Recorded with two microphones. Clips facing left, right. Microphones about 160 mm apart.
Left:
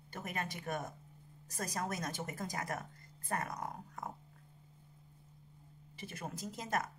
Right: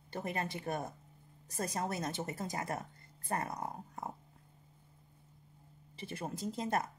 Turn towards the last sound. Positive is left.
turn(degrees=-30)  # may be behind; listen again after turning